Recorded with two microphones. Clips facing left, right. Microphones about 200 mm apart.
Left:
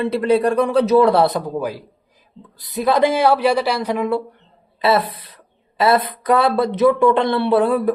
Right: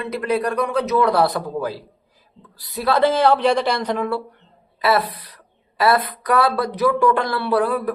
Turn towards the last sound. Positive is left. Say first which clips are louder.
# left 4 dB
turn(degrees=25)  # may be behind; listen again after turning